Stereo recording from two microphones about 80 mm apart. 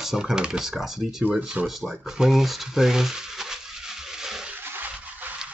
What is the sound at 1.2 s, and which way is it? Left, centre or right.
Speech, centre.